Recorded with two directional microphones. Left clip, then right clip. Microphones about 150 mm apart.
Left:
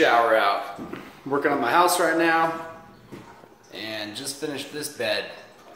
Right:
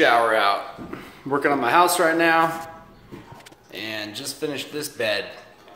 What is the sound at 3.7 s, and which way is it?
Speech, 20° right (ahead or behind).